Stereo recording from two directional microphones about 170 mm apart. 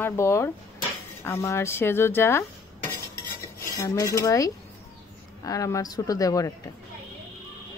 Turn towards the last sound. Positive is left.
turn(degrees=20)  # may be behind; listen again after turning